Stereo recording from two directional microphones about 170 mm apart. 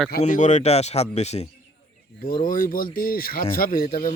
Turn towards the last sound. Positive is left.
turn(degrees=60)  # may be behind; listen again after turning